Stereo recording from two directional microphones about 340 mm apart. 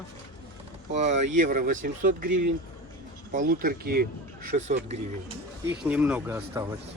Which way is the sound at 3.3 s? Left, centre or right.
Right.